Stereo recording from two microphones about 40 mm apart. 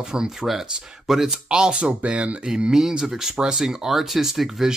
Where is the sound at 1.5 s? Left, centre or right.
Right.